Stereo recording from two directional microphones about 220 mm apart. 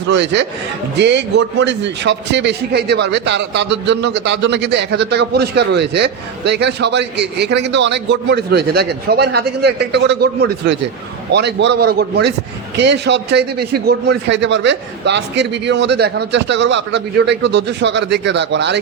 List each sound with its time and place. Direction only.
0.1 s a man's voice: 50° right (ahead or behind)